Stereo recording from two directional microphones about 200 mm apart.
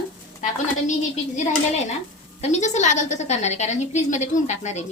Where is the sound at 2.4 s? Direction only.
35° left (ahead or behind).